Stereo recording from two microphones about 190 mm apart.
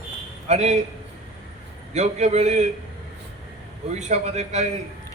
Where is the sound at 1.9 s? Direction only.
35° right (ahead or behind).